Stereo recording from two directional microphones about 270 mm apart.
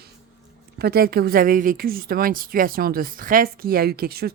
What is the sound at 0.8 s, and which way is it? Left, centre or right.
A woman's voice, right.